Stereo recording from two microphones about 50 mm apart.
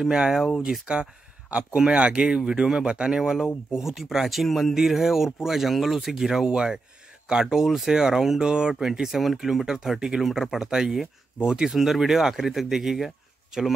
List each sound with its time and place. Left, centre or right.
0.0 s speech: centre